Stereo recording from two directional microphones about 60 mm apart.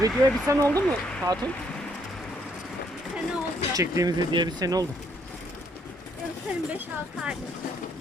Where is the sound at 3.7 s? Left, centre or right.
Right.